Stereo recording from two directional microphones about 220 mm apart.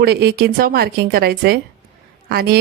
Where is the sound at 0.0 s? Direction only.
45° right (ahead or behind).